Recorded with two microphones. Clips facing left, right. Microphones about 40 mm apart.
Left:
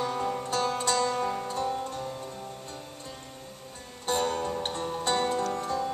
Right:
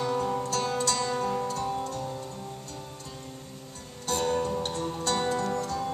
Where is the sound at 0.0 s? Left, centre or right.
Centre.